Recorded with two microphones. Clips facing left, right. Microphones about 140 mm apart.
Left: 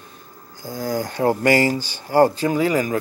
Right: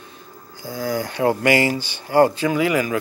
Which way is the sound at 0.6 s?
40° left (ahead or behind).